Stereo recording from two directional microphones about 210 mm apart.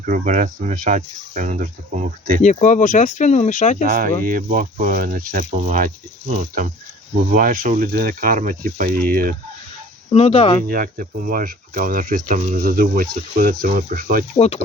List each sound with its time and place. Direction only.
0.0 s speech: 40° right (ahead or behind)
2.4 s speech: 35° left (ahead or behind)
3.8 s speech: 40° right (ahead or behind)
10.1 s speech: 30° left (ahead or behind)
10.7 s speech: 40° right (ahead or behind)
14.3 s speech: 30° left (ahead or behind)